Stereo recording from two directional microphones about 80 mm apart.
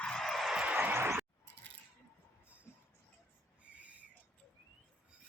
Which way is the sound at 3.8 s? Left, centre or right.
Centre.